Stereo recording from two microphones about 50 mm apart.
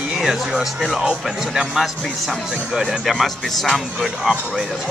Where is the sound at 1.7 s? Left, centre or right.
Centre.